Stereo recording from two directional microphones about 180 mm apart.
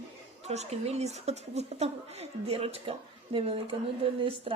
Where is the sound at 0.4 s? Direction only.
40° right (ahead or behind).